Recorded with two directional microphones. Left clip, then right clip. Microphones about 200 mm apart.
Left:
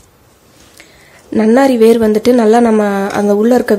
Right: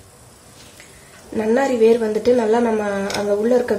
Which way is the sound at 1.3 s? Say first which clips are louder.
Left 8 dB; 45° left (ahead or behind).